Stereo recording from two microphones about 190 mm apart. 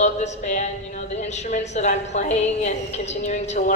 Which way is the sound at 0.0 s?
35° left (ahead or behind).